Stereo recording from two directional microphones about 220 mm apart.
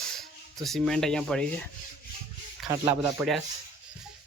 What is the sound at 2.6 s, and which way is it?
Speech, 20° right (ahead or behind).